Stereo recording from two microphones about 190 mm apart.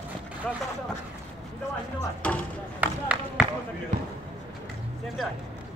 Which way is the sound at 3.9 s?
40° right (ahead or behind).